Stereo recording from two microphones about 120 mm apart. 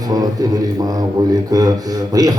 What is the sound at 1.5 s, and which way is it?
Speech, 30° right (ahead or behind).